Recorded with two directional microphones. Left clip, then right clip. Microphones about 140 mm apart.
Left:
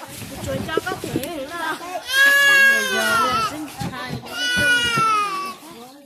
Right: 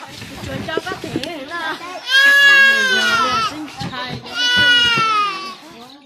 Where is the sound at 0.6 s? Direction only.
45° right (ahead or behind).